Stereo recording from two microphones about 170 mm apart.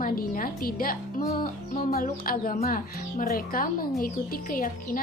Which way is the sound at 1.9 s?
60° left (ahead or behind).